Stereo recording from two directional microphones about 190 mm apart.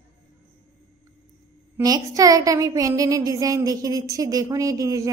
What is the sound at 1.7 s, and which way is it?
Speech, 20° right (ahead or behind).